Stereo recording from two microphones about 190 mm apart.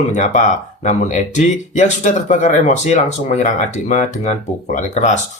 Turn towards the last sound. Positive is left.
turn(degrees=40)  # may be behind; listen again after turning